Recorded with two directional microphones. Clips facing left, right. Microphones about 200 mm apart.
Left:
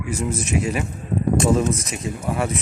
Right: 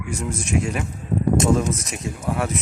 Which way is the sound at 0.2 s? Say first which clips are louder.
Even; 5° left (ahead or behind).